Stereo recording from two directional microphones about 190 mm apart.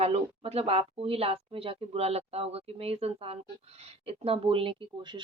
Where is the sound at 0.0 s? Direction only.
30° right (ahead or behind).